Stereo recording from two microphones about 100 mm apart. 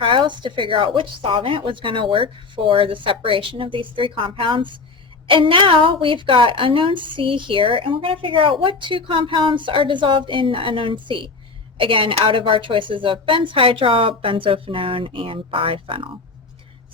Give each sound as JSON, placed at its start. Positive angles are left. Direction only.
{"t": 0.0, "sound": "a woman's voice", "side_deg": -55}